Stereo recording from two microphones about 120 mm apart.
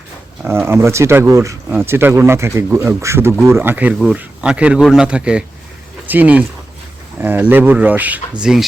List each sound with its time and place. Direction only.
0.4 s speech: 20° right (ahead or behind)